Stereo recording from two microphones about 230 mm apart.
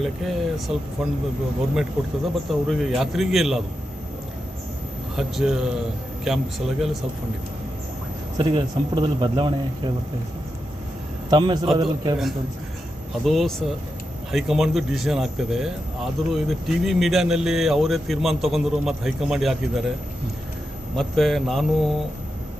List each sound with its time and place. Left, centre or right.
0.0 s speech: centre
5.1 s speech: centre
8.4 s speech: centre
11.3 s speech: centre
13.2 s speech: centre
20.9 s speech: centre